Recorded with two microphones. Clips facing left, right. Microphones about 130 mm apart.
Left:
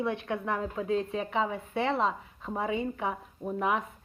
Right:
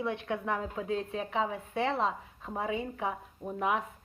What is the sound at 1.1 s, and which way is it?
Speech, 65° left (ahead or behind).